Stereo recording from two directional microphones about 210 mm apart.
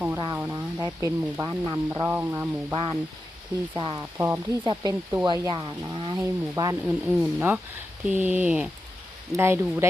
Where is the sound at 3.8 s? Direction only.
20° right (ahead or behind).